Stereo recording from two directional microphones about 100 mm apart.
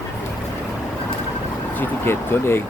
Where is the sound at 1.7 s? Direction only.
20° left (ahead or behind).